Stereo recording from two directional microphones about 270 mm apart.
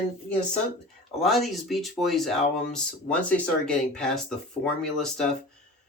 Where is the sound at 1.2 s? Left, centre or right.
Centre.